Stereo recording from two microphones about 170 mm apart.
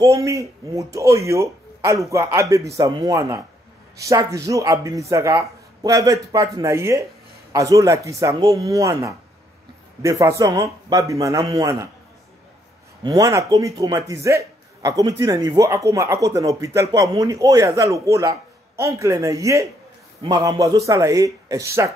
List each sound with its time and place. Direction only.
0.0 s a man's voice: 20° right (ahead or behind)
13.0 s a man's voice: 20° right (ahead or behind)